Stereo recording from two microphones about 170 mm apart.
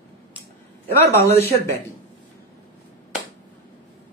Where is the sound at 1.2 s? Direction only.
15° left (ahead or behind).